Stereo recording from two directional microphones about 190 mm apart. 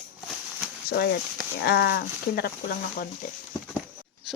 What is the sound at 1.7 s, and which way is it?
Speech, 60° left (ahead or behind).